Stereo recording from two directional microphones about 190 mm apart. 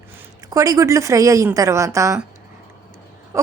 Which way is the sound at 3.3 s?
15° right (ahead or behind).